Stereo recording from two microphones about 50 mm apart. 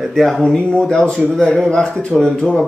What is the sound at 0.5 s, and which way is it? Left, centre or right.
Speech, centre.